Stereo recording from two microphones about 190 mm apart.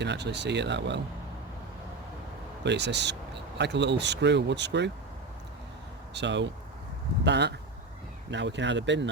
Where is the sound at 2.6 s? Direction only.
65° right (ahead or behind).